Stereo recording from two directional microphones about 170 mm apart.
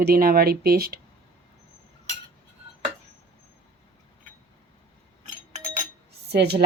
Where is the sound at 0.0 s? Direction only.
60° right (ahead or behind).